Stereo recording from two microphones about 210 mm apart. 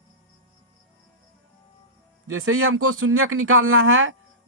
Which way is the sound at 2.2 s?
80° right.